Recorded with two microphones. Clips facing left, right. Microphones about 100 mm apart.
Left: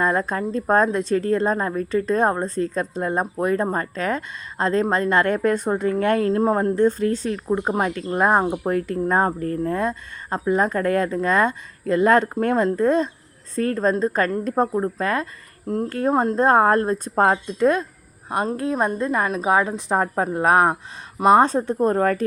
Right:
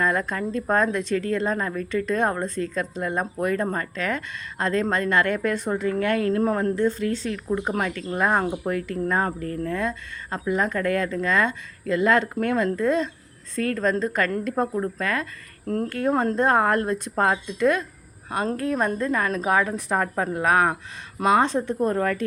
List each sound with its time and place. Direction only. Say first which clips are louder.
0.0 s a woman's voice: left 3 dB; 30° left (ahead or behind); by 5.9 s 45° left (ahead or behind)
6.1 s a woman's voice: left 4 dB; 30° left (ahead or behind)
7.3 s a woman's voice: left 3 dB; 30° left (ahead or behind)
15.6 s a woman's voice: left 2 dB; 20° left (ahead or behind)
15.9 s a woman's voice: left 3 dB; 35° left (ahead or behind)
21.4 s a woman's voice: left 3 dB; 40° left (ahead or behind)